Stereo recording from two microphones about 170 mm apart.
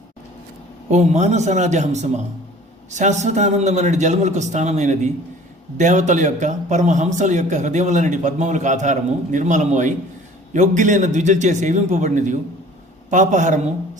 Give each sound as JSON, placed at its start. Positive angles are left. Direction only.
{"t": 0.9, "sound": "a man's voice", "side_deg": -45}